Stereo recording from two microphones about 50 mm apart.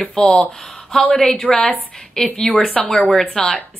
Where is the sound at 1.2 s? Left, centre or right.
Centre.